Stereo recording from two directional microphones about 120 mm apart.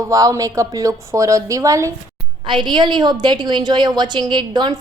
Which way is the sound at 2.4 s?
40° right (ahead or behind).